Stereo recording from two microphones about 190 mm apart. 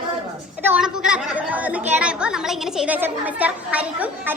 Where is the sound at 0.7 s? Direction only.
5° right (ahead or behind).